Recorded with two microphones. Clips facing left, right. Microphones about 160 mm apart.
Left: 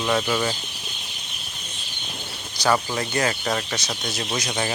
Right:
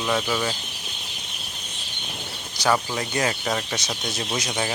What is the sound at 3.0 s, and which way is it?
Speech, 15° right (ahead or behind).